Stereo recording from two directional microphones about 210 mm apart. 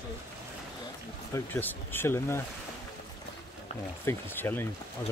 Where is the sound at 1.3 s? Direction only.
10° left (ahead or behind).